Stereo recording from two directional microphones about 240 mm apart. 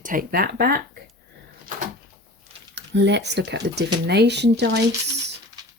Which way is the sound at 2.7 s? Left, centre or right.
Right.